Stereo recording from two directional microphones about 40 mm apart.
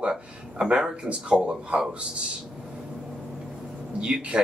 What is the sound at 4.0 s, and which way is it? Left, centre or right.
Speech, right.